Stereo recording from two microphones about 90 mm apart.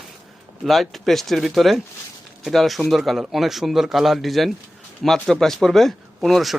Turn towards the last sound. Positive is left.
turn(degrees=0)  # may be behind; listen again after turning